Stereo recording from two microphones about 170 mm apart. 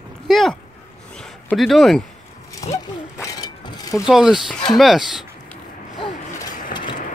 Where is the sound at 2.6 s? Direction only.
20° left (ahead or behind).